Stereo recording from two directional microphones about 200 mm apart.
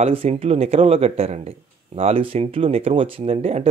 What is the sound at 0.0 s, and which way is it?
Speech, 30° right (ahead or behind).